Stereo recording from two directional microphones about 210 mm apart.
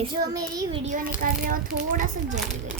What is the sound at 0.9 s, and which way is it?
A child's voice, 40° right (ahead or behind).